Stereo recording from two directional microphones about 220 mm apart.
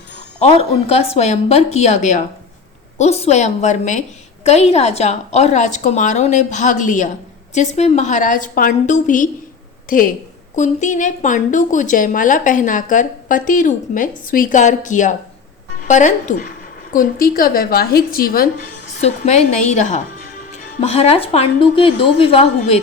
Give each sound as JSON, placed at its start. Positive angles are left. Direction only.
{"t": 0.3, "sound": "a woman's voice", "side_deg": 30}
{"t": 18.9, "sound": "a woman's voice", "side_deg": 30}
{"t": 20.8, "sound": "a woman's voice", "side_deg": 30}